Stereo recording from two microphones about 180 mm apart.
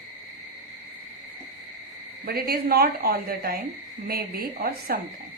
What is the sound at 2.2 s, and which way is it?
A woman's voice, 55° right (ahead or behind).